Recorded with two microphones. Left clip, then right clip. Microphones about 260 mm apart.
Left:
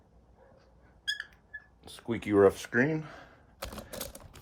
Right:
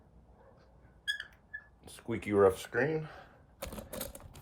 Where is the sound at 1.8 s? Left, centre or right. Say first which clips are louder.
Left 3 dB; left.